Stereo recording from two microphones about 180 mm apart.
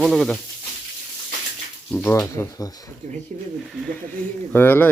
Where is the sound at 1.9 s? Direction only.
10° left (ahead or behind).